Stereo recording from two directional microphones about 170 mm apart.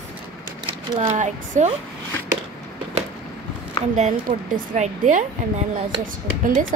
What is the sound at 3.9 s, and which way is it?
A woman's voice, 45° right (ahead or behind).